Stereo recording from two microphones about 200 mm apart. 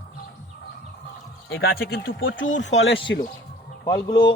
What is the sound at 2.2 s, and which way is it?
Speech, 75° left (ahead or behind).